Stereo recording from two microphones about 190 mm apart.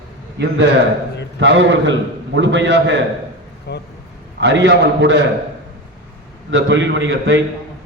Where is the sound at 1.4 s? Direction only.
70° right (ahead or behind).